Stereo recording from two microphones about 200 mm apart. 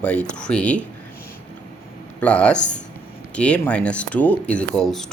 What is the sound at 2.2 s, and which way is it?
Speech, 5° left (ahead or behind).